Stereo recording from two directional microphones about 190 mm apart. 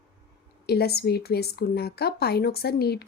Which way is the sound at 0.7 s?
55° left (ahead or behind).